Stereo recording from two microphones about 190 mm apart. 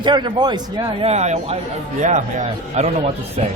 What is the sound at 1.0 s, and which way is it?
Speech, 35° right (ahead or behind).